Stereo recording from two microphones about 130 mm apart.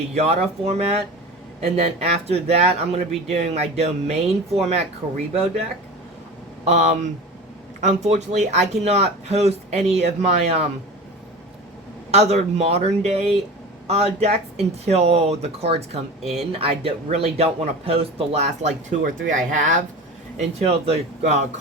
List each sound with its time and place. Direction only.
0.1 s speech: 55° right (ahead or behind)
6.7 s speech: 65° right (ahead or behind)
12.1 s speech: 55° right (ahead or behind); by 19.8 s 85° right
20.3 s speech: 50° right (ahead or behind)